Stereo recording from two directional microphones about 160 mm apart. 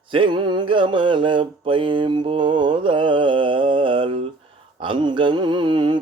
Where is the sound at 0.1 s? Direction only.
30° right (ahead or behind).